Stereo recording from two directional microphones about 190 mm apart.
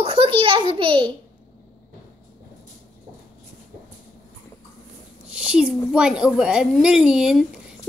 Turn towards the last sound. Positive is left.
turn(degrees=-5)  # may be behind; listen again after turning